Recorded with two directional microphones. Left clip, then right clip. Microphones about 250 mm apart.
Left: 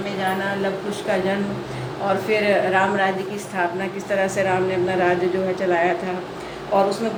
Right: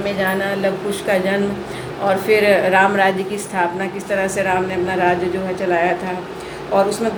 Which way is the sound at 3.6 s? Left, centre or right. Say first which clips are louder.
Right 3 dB; centre.